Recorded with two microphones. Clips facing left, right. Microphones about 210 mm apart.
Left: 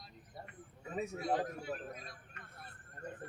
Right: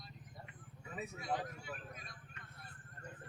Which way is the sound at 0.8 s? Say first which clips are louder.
Left 7 dB; 40° left (ahead or behind).